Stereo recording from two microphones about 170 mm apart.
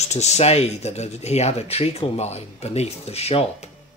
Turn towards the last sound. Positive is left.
turn(degrees=35)  # may be behind; listen again after turning